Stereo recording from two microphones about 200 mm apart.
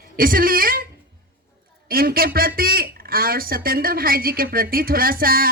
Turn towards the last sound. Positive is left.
turn(degrees=-45)  # may be behind; listen again after turning